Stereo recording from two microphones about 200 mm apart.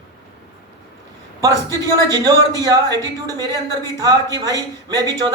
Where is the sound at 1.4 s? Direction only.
20° right (ahead or behind).